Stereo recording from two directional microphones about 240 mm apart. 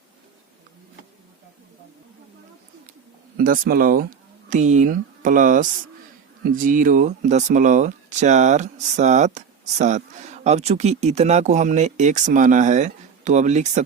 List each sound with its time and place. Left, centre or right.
3.3 s speech: right